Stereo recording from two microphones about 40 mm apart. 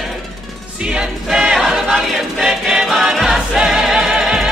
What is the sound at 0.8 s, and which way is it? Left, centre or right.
Music, right.